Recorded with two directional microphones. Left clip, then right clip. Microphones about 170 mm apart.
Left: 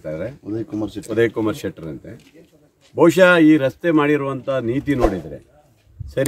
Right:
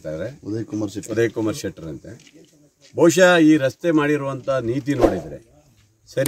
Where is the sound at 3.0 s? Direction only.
Centre (ahead or behind).